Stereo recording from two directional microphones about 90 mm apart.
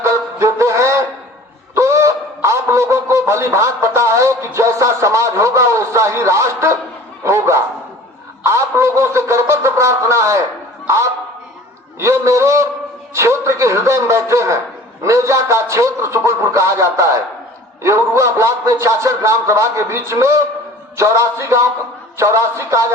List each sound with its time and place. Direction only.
0.0 s honk: 35° right (ahead or behind)
7.3 s bow-wow: 30° right (ahead or behind)
8.4 s music: 30° right (ahead or behind)
10.8 s a sound: 30° right (ahead or behind)
11.9 s a man's voice: 30° right (ahead or behind)